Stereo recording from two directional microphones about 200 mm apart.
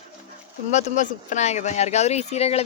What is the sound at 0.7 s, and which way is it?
Speech, 35° left (ahead or behind).